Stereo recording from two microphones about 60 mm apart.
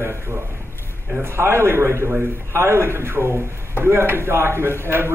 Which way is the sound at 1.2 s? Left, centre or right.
Right.